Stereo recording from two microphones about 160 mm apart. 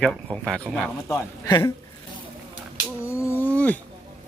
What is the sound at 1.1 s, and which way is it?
Speech, 20° left (ahead or behind).